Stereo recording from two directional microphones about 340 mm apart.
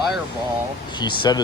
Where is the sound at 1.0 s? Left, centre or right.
Centre.